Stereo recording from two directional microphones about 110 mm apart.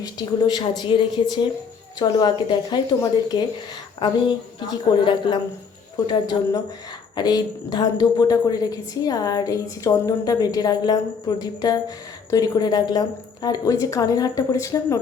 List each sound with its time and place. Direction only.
0.0 s a woman's voice: 35° left (ahead or behind)
4.7 s a woman's voice: 40° left (ahead or behind)